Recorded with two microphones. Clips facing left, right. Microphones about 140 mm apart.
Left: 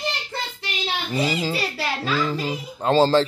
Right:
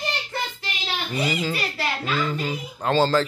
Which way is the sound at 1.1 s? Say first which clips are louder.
Left 2 dB; 30° left (ahead or behind).